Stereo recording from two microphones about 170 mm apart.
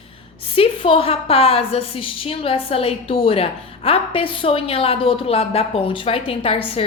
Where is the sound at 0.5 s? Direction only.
30° left (ahead or behind).